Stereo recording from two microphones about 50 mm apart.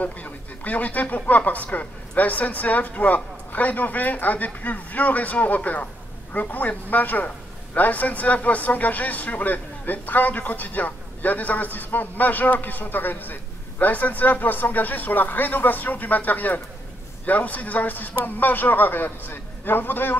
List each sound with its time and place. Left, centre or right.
0.0 s a man's voice: left